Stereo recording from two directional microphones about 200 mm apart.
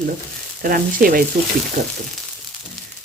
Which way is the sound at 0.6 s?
45° right (ahead or behind).